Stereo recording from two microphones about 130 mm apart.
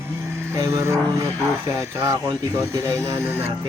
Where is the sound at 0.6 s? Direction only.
25° right (ahead or behind).